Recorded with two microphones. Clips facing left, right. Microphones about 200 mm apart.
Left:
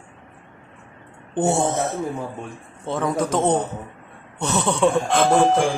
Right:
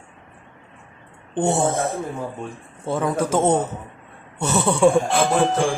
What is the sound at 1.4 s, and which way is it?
Music, centre (ahead or behind).